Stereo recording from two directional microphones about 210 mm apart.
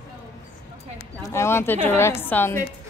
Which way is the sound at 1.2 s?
10° left (ahead or behind).